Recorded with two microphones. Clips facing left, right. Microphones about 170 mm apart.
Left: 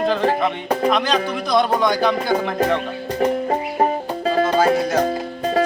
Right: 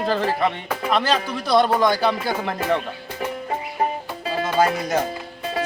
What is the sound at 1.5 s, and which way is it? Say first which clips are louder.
Speech: even; 10° right (ahead or behind).